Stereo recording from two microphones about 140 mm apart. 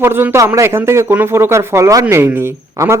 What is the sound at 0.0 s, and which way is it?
Speech, 15° right (ahead or behind).